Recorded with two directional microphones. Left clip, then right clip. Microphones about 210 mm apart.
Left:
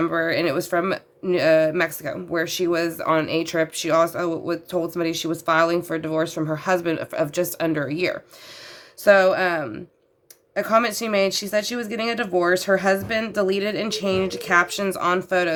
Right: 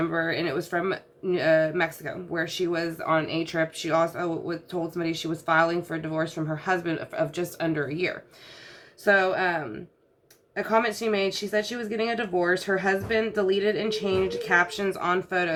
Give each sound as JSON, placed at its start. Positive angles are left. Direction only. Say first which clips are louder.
{"t": 0.0, "sound": "speech", "louder": "left 5 dB", "side_deg": 55}